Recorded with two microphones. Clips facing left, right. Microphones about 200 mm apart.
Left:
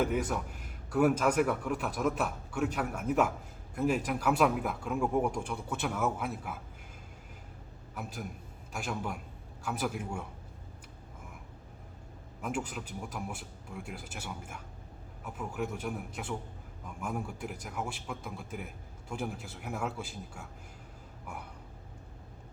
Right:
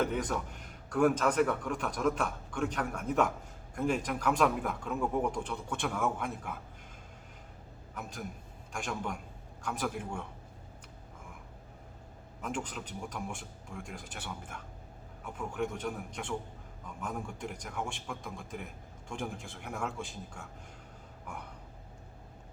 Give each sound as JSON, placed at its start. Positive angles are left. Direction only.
{"t": 0.0, "sound": "a man's voice", "side_deg": 5}
{"t": 8.0, "sound": "a man's voice", "side_deg": 5}
{"t": 12.4, "sound": "a man's voice", "side_deg": 10}